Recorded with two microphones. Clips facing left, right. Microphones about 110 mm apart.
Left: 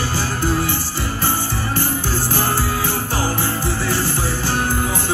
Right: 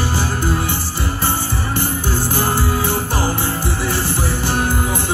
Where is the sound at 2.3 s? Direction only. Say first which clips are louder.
Right 2 dB; 20° right (ahead or behind).